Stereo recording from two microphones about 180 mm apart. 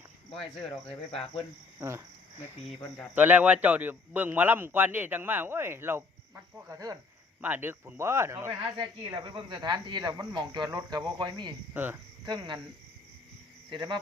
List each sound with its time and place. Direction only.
1.8 s a man's voice: 15° right (ahead or behind)
3.2 s a man's voice: 10° right (ahead or behind)
11.7 s a man's voice: 10° right (ahead or behind)
12.2 s speech: 25° right (ahead or behind)
13.7 s speech: 25° right (ahead or behind)